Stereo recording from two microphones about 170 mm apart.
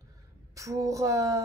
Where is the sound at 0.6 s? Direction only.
20° right (ahead or behind).